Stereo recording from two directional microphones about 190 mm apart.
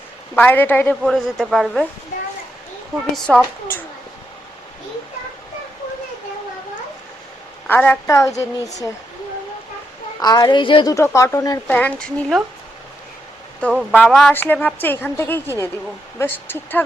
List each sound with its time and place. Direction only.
0.3 s a woman's voice: 10° left (ahead or behind)
3.2 s a woman's voice: 5° left (ahead or behind)
7.7 s a woman's voice: 10° left (ahead or behind)
10.2 s a woman's voice: 20° left (ahead or behind)
13.6 s a woman's voice: 5° left (ahead or behind)